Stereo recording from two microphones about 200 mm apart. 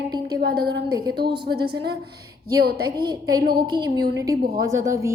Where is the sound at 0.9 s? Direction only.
20° right (ahead or behind).